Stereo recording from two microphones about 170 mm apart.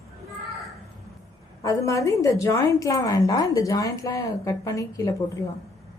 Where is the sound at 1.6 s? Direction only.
20° left (ahead or behind).